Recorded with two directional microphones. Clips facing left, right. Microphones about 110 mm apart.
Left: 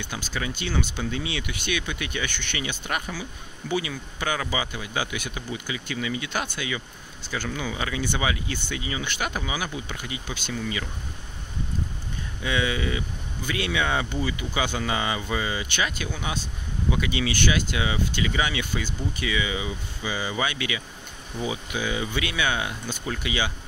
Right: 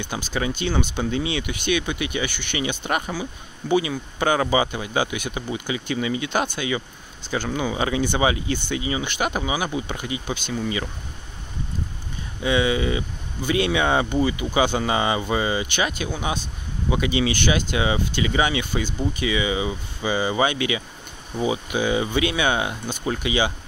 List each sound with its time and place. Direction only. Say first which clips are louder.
0.0 s speech: right 5 dB; 20° right (ahead or behind)
12.4 s speech: right 6 dB; 20° right (ahead or behind)